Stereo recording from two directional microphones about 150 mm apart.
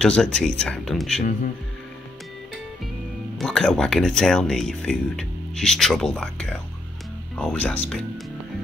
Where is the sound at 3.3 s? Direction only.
5° left (ahead or behind).